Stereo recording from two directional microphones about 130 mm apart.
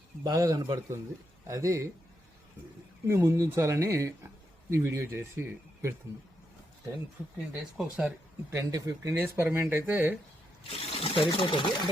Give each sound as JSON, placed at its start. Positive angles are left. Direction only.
{"t": 0.3, "sound": "speech", "side_deg": -30}
{"t": 3.1, "sound": "speech", "side_deg": -20}
{"t": 7.8, "sound": "speech", "side_deg": -10}
{"t": 10.6, "sound": "speech", "side_deg": 50}